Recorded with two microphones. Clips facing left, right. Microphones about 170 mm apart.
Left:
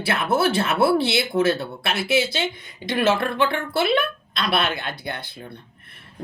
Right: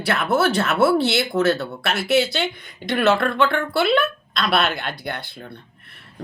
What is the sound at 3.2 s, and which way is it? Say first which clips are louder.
Speech: right 2 dB; 25° left (ahead or behind).